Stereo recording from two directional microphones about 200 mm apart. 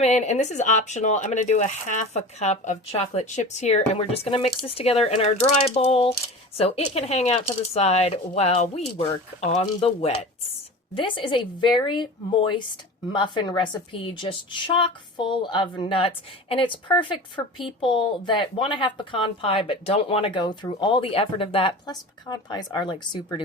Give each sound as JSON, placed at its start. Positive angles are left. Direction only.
{"t": 0.0, "sound": "a woman's voice", "side_deg": 35}